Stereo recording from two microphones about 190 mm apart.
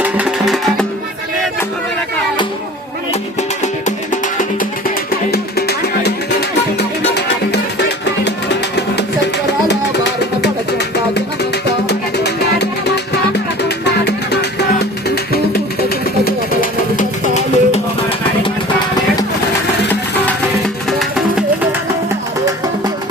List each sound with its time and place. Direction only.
0.0 s music: 5° right (ahead or behind)
3.6 s music: 40° left (ahead or behind)
5.3 s music: 55° left (ahead or behind); by 17.7 s 40° left (ahead or behind)
21.0 s music: 5° right (ahead or behind)